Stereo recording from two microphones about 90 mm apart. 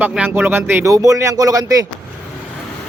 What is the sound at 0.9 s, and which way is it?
Speech, 40° right (ahead or behind).